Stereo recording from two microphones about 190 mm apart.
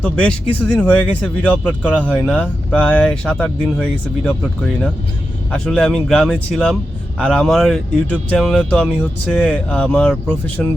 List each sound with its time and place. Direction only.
0.0 s speech: 5° left (ahead or behind)